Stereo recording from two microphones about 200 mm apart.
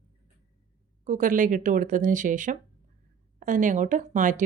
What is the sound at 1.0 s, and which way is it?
Speech, 40° right (ahead or behind).